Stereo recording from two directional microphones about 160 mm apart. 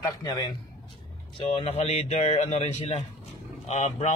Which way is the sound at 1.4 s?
40° left (ahead or behind).